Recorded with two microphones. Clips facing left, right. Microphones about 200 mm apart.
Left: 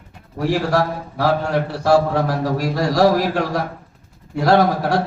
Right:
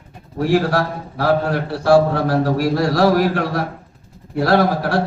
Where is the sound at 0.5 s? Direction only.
60° right (ahead or behind).